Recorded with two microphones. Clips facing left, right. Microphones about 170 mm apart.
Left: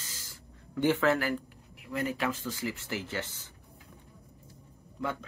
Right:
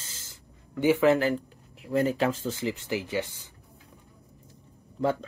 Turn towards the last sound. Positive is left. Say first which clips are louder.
# right 8 dB
turn(degrees=-30)  # may be behind; listen again after turning